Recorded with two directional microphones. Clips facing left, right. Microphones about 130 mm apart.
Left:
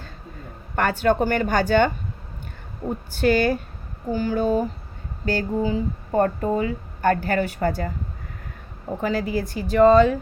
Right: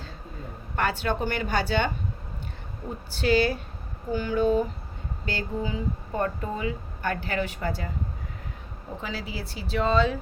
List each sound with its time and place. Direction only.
0.8 s speech: 45° left (ahead or behind)
3.2 s speech: 50° left (ahead or behind)
9.0 s speech: 50° left (ahead or behind)